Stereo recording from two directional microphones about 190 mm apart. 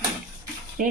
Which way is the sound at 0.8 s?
45° right (ahead or behind).